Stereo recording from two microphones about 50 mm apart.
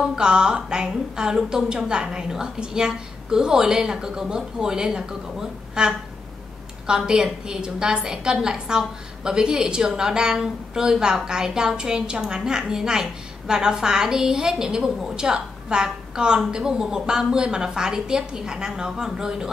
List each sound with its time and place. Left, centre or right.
0.0 s a woman's voice: centre